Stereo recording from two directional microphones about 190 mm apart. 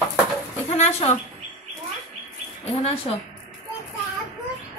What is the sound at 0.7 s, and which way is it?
Speech, 35° left (ahead or behind).